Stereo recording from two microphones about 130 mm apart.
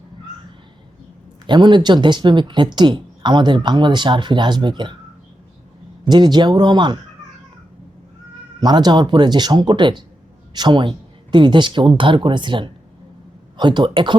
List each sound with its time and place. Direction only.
1.5 s speech: 35° right (ahead or behind)
6.1 s speech: 35° right (ahead or behind)
8.6 s speech: 35° right (ahead or behind)